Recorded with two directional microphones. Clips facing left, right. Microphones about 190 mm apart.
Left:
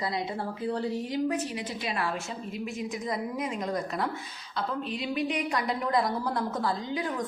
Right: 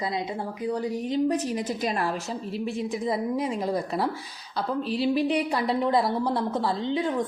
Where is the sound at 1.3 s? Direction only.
40° right (ahead or behind).